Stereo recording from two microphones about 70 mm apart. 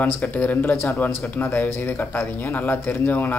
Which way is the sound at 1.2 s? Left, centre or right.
Left.